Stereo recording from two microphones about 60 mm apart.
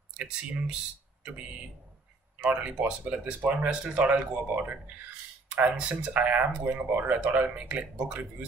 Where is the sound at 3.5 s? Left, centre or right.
Centre.